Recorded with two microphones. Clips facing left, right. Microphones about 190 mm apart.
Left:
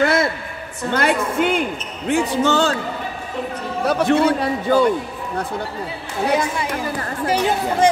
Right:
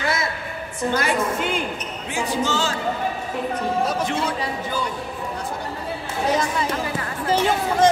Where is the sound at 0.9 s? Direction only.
60° left (ahead or behind).